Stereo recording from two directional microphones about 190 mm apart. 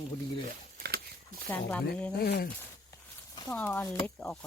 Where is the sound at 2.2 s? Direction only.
55° left (ahead or behind).